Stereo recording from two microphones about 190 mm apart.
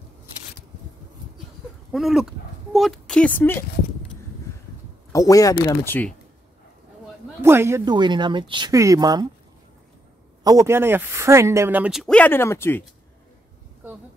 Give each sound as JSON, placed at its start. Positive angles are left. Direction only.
{"t": 1.9, "sound": "speech", "side_deg": 0}
{"t": 5.1, "sound": "speech", "side_deg": 15}
{"t": 7.4, "sound": "speech", "side_deg": -15}
{"t": 10.4, "sound": "speech", "side_deg": -15}